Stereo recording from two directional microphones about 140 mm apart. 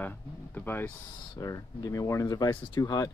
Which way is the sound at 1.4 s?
25° left (ahead or behind).